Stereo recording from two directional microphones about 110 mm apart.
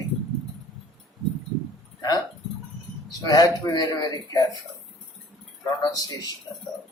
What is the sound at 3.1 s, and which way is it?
Speech, 35° left (ahead or behind).